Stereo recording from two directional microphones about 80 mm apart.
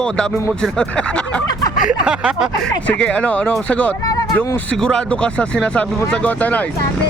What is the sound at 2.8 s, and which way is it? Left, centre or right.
Speech, centre.